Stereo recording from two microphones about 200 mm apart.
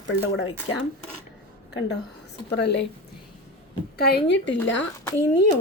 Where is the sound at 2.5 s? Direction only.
60° left (ahead or behind).